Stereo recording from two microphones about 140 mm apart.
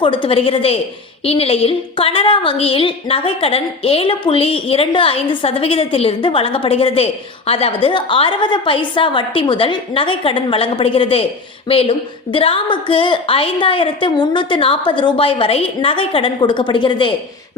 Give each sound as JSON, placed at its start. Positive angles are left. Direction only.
{"t": 0.0, "sound": "a woman's voice", "side_deg": 35}